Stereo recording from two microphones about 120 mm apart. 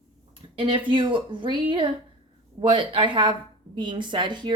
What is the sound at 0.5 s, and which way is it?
Speech, 45° right (ahead or behind).